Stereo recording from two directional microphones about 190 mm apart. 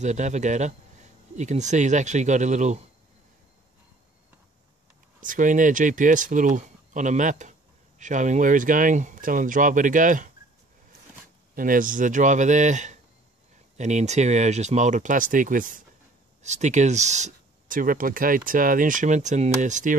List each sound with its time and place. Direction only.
0.0 s speech: 40° right (ahead or behind)
5.2 s speech: 45° right (ahead or behind)
11.5 s speech: 45° right (ahead or behind)